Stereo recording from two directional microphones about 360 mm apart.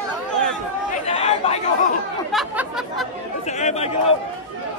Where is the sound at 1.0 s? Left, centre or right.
Centre.